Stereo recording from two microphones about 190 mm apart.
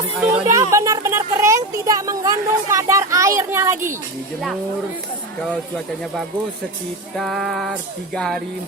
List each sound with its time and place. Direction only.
0.2 s a sound: 10° right (ahead or behind)
2.7 s speech: 15° right (ahead or behind)
5.5 s music: 5° left (ahead or behind)